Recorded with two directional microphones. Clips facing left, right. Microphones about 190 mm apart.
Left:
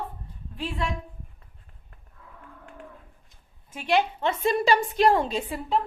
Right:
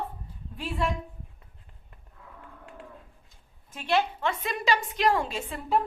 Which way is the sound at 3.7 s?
10° left (ahead or behind).